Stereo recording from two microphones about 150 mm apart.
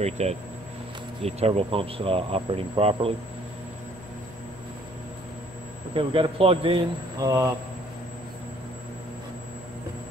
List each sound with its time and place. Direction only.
0.0 s speech: 45° right (ahead or behind)
5.9 s speech: 35° right (ahead or behind)
7.2 s speech: 20° right (ahead or behind)